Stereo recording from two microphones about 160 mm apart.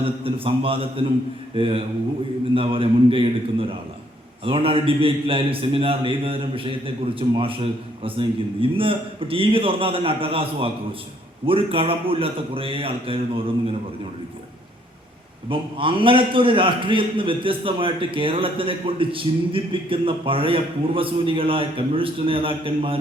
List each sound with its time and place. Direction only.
0.0 s a man's voice: 35° right (ahead or behind)
15.4 s a man's voice: 35° right (ahead or behind)